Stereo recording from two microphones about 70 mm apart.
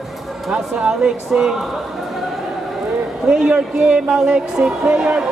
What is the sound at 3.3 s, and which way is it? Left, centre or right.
Speech, centre.